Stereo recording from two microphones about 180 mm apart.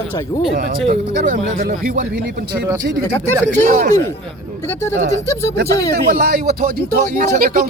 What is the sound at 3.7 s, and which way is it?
Speech, 50° right (ahead or behind).